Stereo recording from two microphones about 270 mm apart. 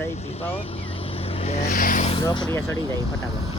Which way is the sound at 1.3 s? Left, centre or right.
Left.